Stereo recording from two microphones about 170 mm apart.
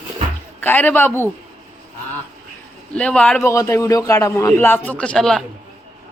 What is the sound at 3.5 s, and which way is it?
A man's voice, 20° left (ahead or behind).